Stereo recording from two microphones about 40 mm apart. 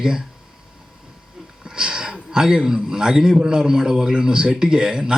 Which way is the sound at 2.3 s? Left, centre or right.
Centre.